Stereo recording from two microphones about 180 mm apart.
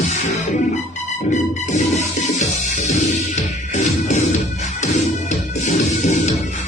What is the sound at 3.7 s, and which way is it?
Music, 40° left (ahead or behind).